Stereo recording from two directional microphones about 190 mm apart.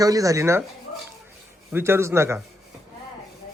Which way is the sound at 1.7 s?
10° right (ahead or behind).